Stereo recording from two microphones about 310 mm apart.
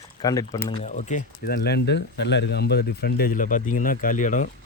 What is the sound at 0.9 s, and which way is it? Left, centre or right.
Speech, left.